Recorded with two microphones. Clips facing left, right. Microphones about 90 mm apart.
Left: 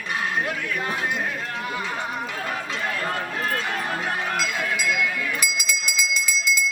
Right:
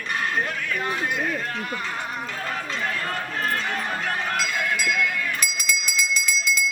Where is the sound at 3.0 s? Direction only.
5° left (ahead or behind).